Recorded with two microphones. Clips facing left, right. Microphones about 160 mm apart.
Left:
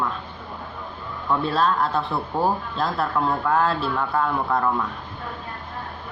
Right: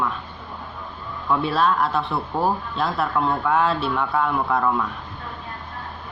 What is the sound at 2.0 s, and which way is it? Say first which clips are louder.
Speech: even; centre (ahead or behind).